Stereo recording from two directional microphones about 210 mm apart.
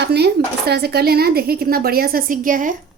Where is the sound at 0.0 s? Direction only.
50° right (ahead or behind).